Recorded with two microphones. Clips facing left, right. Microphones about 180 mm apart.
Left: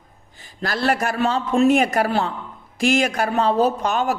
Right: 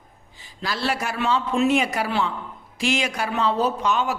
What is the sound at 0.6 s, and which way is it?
Speech, 50° left (ahead or behind).